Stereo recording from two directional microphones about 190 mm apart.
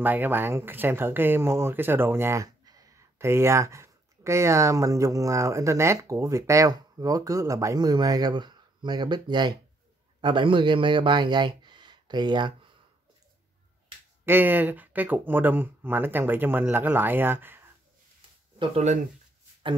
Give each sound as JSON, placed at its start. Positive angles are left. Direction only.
{"t": 0.0, "sound": "a man's voice", "side_deg": -10}
{"t": 14.2, "sound": "speech", "side_deg": -10}
{"t": 18.6, "sound": "speech", "side_deg": -35}